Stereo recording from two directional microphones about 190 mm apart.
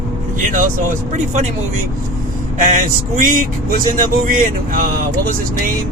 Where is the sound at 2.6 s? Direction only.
45° right (ahead or behind).